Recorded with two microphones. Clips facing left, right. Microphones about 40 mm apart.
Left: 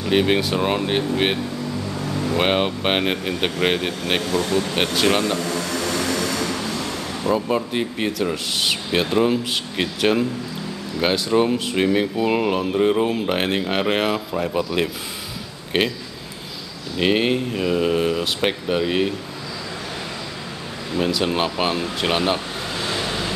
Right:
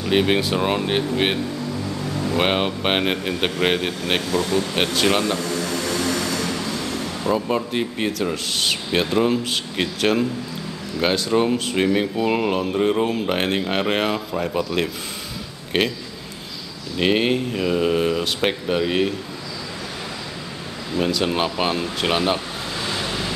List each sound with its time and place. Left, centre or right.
0.0 s speech: centre
5.5 s aircraft: left
5.9 s aircraft: centre
7.2 s speech: centre
17.0 s speech: centre
20.9 s speech: centre
22.8 s vehicle: centre